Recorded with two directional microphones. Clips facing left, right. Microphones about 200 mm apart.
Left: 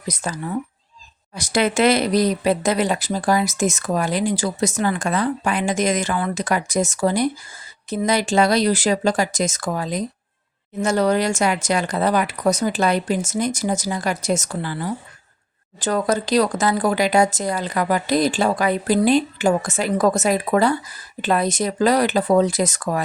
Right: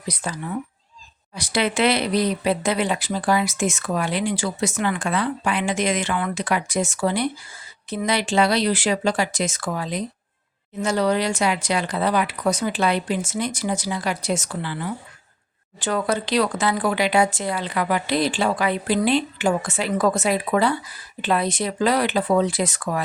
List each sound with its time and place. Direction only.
0.1 s speech: 45° left (ahead or behind)
1.4 s speech: 45° left (ahead or behind)